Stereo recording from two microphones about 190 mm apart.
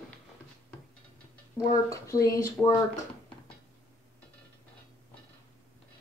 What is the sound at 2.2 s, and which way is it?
Speech, 15° left (ahead or behind).